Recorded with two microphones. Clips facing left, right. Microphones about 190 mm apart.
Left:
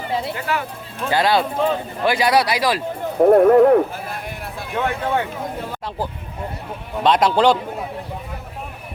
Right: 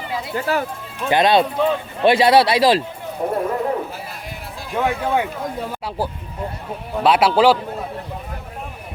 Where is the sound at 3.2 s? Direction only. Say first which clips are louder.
Left 11 dB; 60° left (ahead or behind).